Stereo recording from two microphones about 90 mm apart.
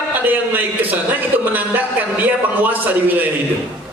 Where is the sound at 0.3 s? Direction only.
20° right (ahead or behind).